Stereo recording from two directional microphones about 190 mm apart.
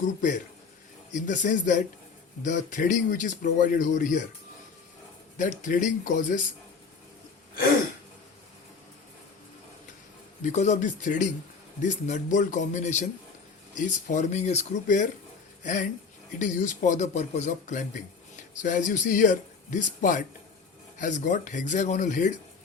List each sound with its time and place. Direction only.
0.2 s speech: 40° left (ahead or behind)
5.4 s speech: 40° left (ahead or behind)
10.4 s speech: 40° left (ahead or behind)